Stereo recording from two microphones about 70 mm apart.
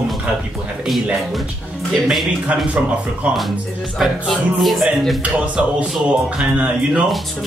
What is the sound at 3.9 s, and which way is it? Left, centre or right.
Speech, centre.